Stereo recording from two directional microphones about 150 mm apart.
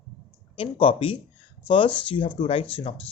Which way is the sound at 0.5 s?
35° left (ahead or behind).